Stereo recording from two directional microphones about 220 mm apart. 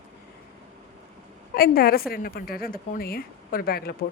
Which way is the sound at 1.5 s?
40° left (ahead or behind).